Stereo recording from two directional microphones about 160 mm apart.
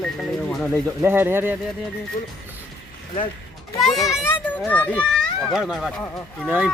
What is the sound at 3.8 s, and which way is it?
Speech, centre (ahead or behind).